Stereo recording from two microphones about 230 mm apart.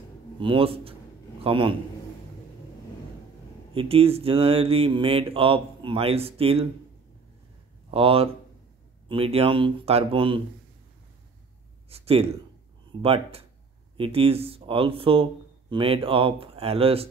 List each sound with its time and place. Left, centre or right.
0.4 s speech: right
3.7 s speech: right
7.9 s speech: right
11.9 s speech: right